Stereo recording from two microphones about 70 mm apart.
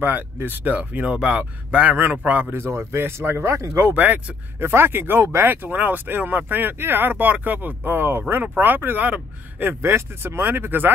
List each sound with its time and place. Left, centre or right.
0.0 s speech: right
2.6 s speech: right
3.9 s speech: right
4.6 s speech: right